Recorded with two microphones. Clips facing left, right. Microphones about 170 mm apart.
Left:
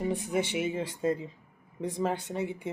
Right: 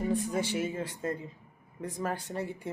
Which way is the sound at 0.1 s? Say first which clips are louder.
Even; 20° left (ahead or behind).